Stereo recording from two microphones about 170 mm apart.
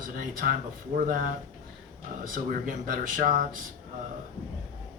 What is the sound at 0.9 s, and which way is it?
Speech, 50° right (ahead or behind).